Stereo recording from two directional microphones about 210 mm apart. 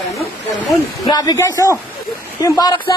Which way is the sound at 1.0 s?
20° left (ahead or behind).